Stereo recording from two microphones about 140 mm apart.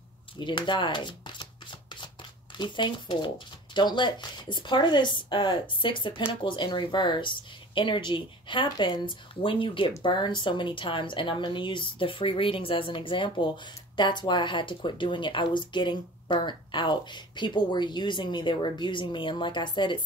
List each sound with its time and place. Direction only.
0.4 s shuffling cards: 35° left (ahead or behind)
2.5 s speech: 35° left (ahead or behind)